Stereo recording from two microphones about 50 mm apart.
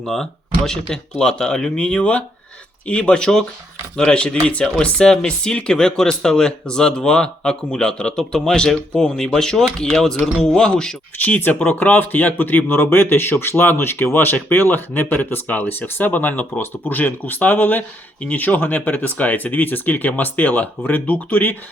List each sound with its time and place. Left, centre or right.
0.0 s speech: centre
11.2 s speech: left